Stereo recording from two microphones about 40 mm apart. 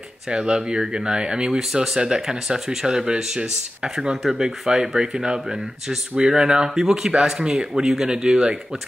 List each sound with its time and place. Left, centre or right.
0.3 s speech: right
1.6 s speech: centre